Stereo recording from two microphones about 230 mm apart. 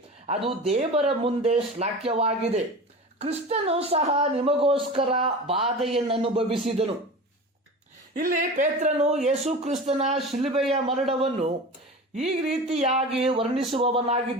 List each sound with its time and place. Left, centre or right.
0.4 s a woman's voice: right
8.2 s a woman's voice: right